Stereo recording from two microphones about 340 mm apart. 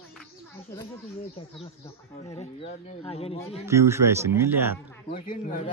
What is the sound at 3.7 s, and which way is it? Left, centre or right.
Speech, centre.